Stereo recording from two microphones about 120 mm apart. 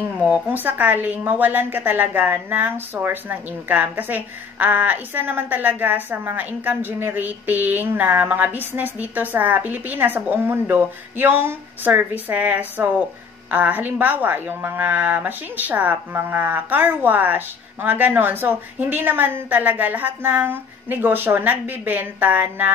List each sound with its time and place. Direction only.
0.2 s a woman's voice: 15° right (ahead or behind)